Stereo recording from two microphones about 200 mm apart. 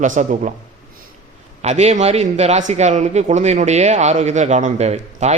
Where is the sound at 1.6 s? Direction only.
35° right (ahead or behind).